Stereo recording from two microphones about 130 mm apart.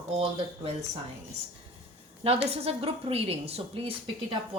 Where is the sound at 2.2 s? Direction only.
50° right (ahead or behind).